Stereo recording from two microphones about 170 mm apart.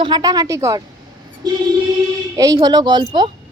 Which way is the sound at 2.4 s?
20° right (ahead or behind).